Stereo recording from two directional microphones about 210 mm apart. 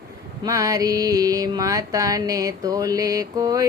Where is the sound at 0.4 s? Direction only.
15° right (ahead or behind).